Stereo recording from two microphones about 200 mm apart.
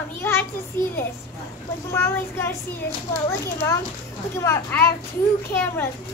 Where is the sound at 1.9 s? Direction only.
10° left (ahead or behind).